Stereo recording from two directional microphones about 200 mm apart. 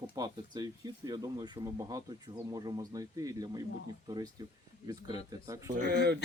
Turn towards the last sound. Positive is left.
turn(degrees=-55)  # may be behind; listen again after turning